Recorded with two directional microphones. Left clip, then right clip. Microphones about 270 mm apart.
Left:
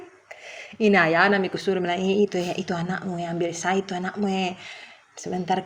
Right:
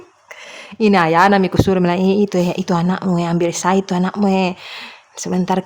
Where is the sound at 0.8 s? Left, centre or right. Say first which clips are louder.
Right 6 dB; centre.